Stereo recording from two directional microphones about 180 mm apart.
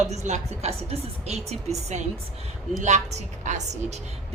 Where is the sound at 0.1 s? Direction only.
40° right (ahead or behind).